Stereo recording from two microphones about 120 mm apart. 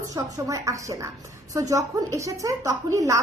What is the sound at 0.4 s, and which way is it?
A woman's voice, 25° right (ahead or behind).